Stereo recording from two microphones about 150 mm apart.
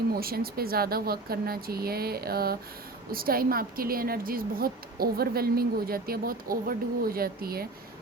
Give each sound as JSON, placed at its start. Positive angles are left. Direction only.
{"t": 0.1, "sound": "speech", "side_deg": -90}
{"t": 3.1, "sound": "speech", "side_deg": -80}